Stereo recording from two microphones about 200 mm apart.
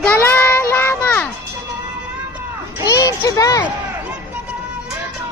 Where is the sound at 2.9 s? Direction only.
15° left (ahead or behind).